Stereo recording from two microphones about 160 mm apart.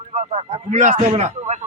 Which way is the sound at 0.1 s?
45° right (ahead or behind).